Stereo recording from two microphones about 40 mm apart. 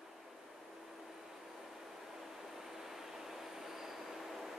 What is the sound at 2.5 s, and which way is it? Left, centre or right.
Train, centre.